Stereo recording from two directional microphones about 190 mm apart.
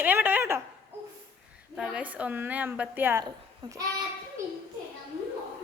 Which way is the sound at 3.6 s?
25° right (ahead or behind).